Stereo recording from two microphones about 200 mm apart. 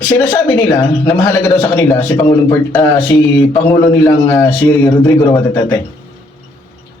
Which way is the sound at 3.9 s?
15° left (ahead or behind).